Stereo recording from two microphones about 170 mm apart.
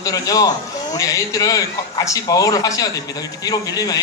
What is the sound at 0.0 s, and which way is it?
Speech, 20° left (ahead or behind).